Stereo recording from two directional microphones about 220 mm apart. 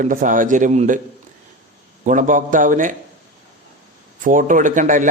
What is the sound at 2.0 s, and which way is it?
Speech, 35° right (ahead or behind).